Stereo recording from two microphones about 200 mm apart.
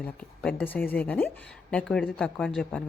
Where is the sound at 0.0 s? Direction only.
5° left (ahead or behind).